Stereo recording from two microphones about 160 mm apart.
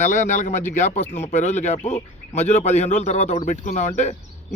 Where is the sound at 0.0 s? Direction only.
50° left (ahead or behind).